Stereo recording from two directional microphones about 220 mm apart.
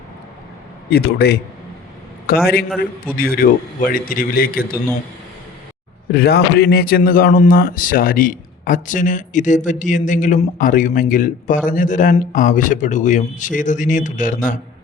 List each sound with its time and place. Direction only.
0.9 s a man's voice: 45° left (ahead or behind)
6.1 s a man's voice: 45° left (ahead or behind)